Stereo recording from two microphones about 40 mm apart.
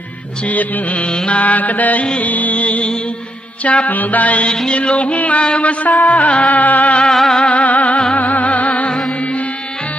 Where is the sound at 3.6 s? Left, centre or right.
Left.